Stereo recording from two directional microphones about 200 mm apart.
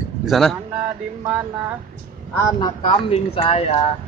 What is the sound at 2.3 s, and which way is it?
Speech, 15° left (ahead or behind).